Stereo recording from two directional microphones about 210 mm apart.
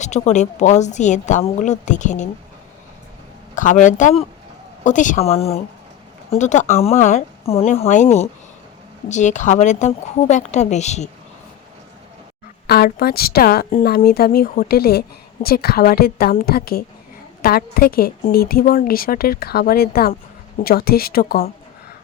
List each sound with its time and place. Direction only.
0.0 s a woman's voice: 35° left (ahead or behind)
3.5 s a woman's voice: 35° left (ahead or behind)
9.0 s a woman's voice: 35° left (ahead or behind)
12.6 s a woman's voice: 50° left (ahead or behind)